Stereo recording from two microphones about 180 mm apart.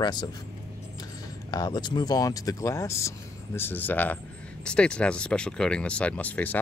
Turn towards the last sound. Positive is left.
turn(degrees=10)  # may be behind; listen again after turning